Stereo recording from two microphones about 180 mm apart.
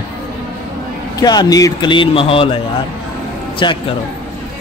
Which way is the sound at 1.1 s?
20° left (ahead or behind).